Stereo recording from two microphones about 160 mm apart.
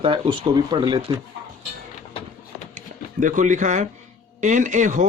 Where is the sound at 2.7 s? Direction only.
55° right (ahead or behind).